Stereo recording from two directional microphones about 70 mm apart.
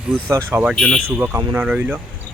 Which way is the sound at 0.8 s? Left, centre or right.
Centre.